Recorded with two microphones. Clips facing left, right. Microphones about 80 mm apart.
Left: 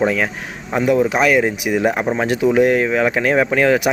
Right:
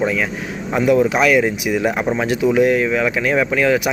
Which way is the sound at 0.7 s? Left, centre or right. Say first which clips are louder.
Right 1 dB; left.